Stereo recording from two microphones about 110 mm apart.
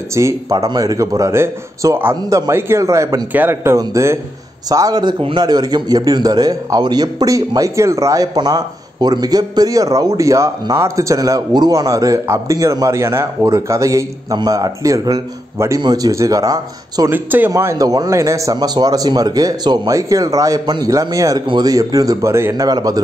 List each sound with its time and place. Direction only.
0.1 s a man's voice: 30° right (ahead or behind)
15.8 s a man's voice: 35° right (ahead or behind)
17.1 s speech: 15° right (ahead or behind)
17.5 s a man's voice: 25° right (ahead or behind)
19.9 s a man's voice: 30° right (ahead or behind)